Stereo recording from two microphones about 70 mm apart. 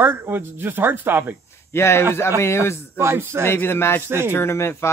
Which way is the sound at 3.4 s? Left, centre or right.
Left.